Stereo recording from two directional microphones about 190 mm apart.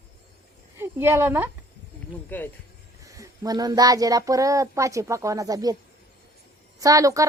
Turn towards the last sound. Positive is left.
turn(degrees=-15)  # may be behind; listen again after turning